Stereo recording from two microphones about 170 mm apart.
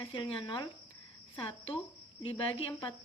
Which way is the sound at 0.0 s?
30° left (ahead or behind).